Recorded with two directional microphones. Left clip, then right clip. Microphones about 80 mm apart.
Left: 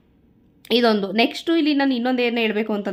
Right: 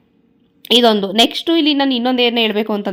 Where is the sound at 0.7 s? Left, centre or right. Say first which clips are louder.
Right 6 dB; right.